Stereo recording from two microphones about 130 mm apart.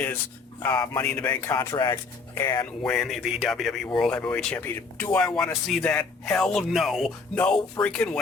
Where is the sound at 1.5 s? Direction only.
35° left (ahead or behind).